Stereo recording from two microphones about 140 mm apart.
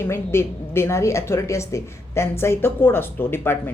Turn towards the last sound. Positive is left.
turn(degrees=15)  # may be behind; listen again after turning